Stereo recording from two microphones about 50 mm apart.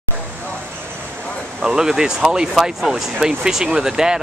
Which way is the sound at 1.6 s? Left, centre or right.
Centre.